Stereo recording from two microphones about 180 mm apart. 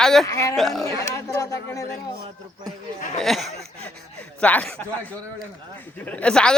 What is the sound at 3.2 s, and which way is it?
Speech, centre (ahead or behind).